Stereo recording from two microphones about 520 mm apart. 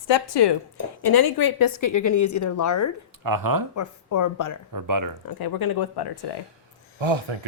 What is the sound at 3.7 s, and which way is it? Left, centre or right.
Speech, left.